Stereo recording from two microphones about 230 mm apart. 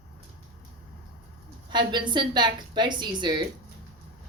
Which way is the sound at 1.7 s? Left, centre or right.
Centre.